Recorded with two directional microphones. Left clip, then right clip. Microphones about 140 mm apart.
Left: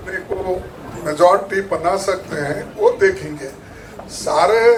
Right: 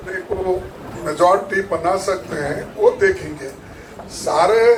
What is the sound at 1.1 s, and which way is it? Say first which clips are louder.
A man's voice: left 2 dB; 55° left (ahead or behind).